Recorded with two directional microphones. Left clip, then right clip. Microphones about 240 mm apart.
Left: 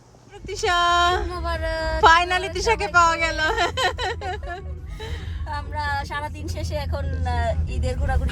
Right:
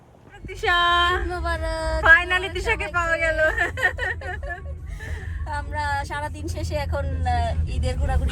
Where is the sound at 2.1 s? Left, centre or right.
Centre.